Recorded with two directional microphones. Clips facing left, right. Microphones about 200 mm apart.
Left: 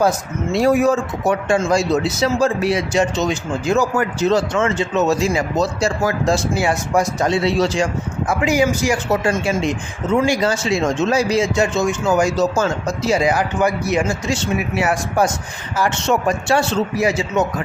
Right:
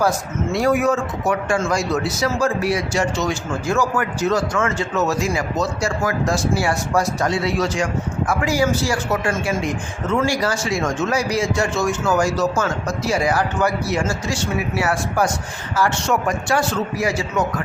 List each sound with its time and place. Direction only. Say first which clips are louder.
0.5 s speech: left 3 dB; 25° left (ahead or behind)